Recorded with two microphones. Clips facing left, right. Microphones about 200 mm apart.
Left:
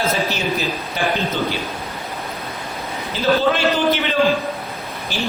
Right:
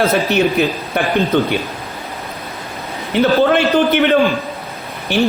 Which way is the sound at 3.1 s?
60° right (ahead or behind).